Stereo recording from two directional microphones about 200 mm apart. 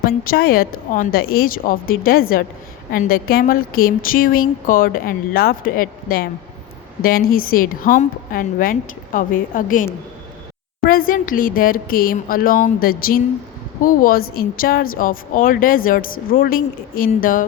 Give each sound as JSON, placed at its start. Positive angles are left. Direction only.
{"t": 0.0, "sound": "speech", "side_deg": 50}
{"t": 10.8, "sound": "speech", "side_deg": 45}